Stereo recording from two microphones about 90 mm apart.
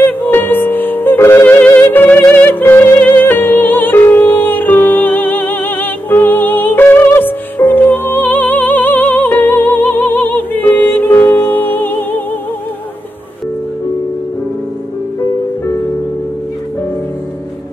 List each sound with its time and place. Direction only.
0.0 s music: 20° left (ahead or behind)